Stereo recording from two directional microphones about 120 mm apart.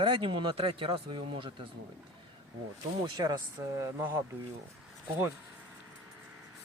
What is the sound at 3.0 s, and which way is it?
Speech, 35° right (ahead or behind).